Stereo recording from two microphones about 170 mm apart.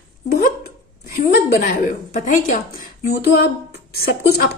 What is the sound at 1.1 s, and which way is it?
A woman's voice, 55° left (ahead or behind).